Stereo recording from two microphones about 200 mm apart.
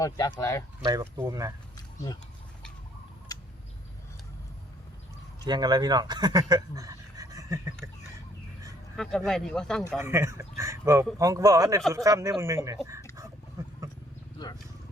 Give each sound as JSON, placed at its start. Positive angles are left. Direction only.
{"t": 0.0, "sound": "speech", "side_deg": 15}
{"t": 0.9, "sound": "speech", "side_deg": -15}
{"t": 3.3, "sound": "bird", "side_deg": 20}
{"t": 5.5, "sound": "speech", "side_deg": -20}
{"t": 9.0, "sound": "speech", "side_deg": 0}
{"t": 10.0, "sound": "speech", "side_deg": -15}
{"t": 13.6, "sound": "wild animals", "side_deg": -15}
{"t": 14.4, "sound": "wild animals", "side_deg": 20}